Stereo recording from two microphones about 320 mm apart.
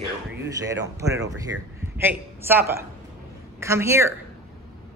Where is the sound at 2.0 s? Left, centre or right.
Centre.